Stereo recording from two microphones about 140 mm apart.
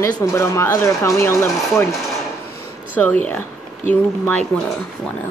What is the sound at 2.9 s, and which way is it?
Speech, 10° left (ahead or behind).